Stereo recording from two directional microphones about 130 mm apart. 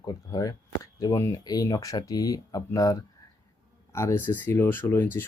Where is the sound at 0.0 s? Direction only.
30° left (ahead or behind).